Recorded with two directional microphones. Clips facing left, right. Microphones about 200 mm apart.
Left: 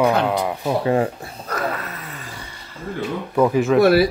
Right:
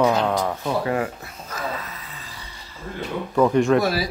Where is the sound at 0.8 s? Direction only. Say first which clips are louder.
Left 5 dB; 30° left (ahead or behind).